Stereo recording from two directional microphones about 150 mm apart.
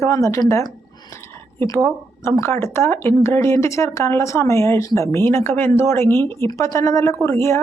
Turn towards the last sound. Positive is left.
turn(degrees=20)  # may be behind; listen again after turning